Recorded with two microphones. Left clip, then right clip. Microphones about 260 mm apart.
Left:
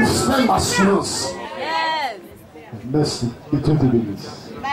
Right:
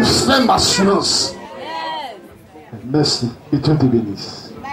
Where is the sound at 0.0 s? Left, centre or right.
Right.